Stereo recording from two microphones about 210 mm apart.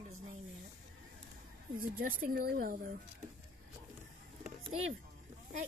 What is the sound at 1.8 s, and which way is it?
A woman's voice, 40° right (ahead or behind).